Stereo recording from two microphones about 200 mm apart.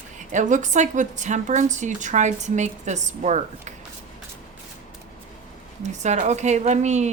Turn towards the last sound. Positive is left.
turn(degrees=-35)  # may be behind; listen again after turning